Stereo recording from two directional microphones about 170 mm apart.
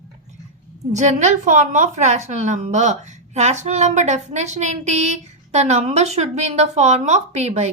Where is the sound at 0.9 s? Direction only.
45° right (ahead or behind).